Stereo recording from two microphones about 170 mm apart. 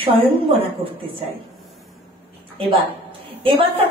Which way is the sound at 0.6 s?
30° right (ahead or behind).